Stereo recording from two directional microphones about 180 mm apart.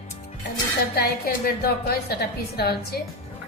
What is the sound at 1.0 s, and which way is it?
Speech, 60° left (ahead or behind).